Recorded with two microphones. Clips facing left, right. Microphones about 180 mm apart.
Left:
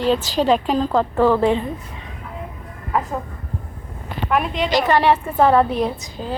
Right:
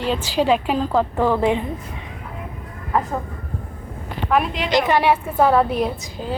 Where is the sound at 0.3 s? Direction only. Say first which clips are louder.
Right 3 dB; 10° right (ahead or behind).